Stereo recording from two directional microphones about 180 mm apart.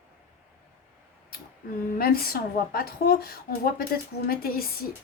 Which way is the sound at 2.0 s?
55° left (ahead or behind).